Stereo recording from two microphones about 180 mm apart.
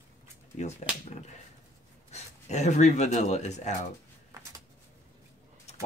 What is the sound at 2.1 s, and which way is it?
Speech, 40° left (ahead or behind).